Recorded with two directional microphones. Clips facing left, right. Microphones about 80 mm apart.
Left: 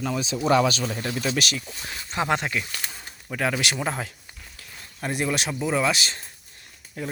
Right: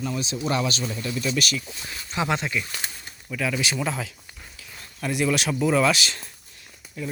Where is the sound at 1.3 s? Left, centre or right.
Left.